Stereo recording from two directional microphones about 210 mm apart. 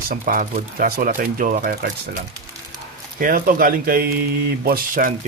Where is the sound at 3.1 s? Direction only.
40° right (ahead or behind).